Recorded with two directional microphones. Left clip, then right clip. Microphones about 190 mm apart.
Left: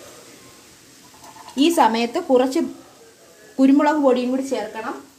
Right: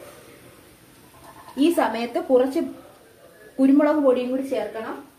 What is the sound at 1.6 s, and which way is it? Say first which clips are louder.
A woman's voice: left 4 dB; 55° left (ahead or behind).